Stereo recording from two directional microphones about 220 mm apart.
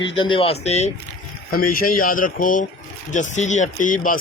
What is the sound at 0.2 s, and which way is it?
Speech, 25° left (ahead or behind).